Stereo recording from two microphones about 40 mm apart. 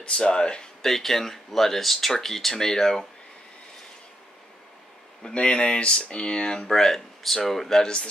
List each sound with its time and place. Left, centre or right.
0.0 s speech: left
0.8 s speech: centre
5.2 s speech: left